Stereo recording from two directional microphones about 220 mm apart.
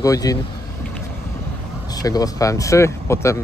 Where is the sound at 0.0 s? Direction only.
15° left (ahead or behind).